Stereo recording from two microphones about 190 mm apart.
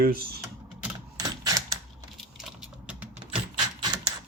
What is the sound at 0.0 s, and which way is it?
Speech, 50° right (ahead or behind).